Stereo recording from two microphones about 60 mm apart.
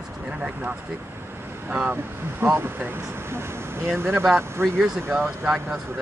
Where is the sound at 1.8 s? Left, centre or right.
Right.